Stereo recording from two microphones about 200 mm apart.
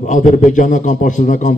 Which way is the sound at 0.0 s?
35° left (ahead or behind).